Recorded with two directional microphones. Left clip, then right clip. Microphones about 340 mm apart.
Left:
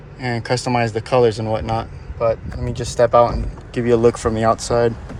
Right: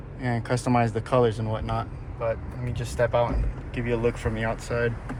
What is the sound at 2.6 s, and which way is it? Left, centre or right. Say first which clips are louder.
Speech: left 9 dB; left.